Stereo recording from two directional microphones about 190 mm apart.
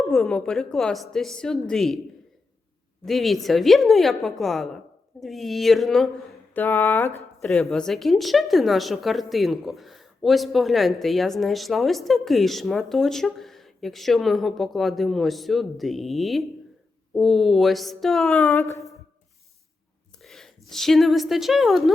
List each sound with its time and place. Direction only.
0.1 s a woman's voice: centre (ahead or behind)
3.1 s a woman's voice: centre (ahead or behind)
18.5 s speech: 15° left (ahead or behind)
20.2 s a woman's voice: centre (ahead or behind)